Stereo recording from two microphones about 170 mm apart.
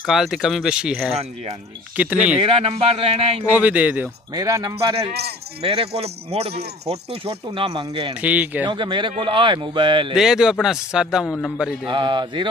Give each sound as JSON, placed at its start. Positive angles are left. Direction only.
{"t": 0.0, "sound": "a man's voice", "side_deg": 0}
{"t": 2.3, "sound": "speech", "side_deg": -35}
{"t": 3.5, "sound": "speech", "side_deg": -10}
{"t": 4.3, "sound": "speech", "side_deg": -20}
{"t": 5.6, "sound": "speech", "side_deg": -35}
{"t": 8.2, "sound": "speech", "side_deg": -10}
{"t": 8.6, "sound": "speech", "side_deg": -30}
{"t": 10.1, "sound": "a man's voice", "side_deg": -5}
{"t": 11.9, "sound": "speech", "side_deg": -30}